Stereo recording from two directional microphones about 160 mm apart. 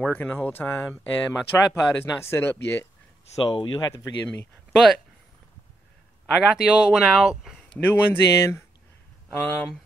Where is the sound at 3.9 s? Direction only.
15° left (ahead or behind).